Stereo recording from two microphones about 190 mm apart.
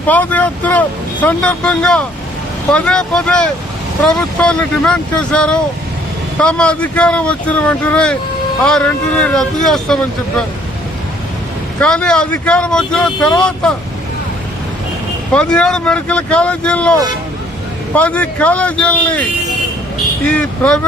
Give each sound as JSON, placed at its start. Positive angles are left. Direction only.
{"t": 0.1, "sound": "speech", "side_deg": 10}
{"t": 11.8, "sound": "speech", "side_deg": 5}
{"t": 15.3, "sound": "speech", "side_deg": 5}
{"t": 20.2, "sound": "speech", "side_deg": 5}